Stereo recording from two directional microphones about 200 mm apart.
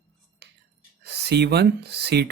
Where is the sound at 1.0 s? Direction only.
55° right (ahead or behind).